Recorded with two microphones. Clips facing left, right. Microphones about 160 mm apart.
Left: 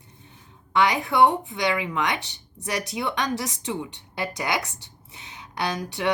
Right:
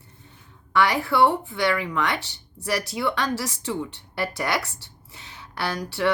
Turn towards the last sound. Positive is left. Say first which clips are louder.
# right 1 dB
turn(degrees=20)  # may be behind; listen again after turning